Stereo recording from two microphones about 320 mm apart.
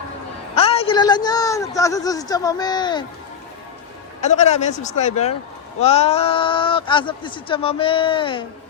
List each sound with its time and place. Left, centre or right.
0.5 s a woman's voice: centre
4.4 s speech: left